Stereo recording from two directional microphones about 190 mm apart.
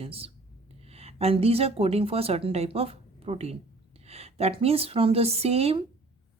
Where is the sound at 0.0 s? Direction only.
30° right (ahead or behind).